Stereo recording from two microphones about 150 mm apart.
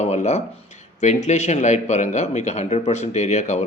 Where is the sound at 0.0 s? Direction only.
50° left (ahead or behind).